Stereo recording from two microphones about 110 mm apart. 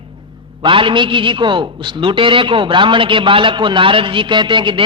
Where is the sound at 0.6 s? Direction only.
50° right (ahead or behind).